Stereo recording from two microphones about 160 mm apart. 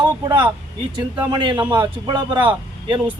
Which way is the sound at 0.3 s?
30° right (ahead or behind).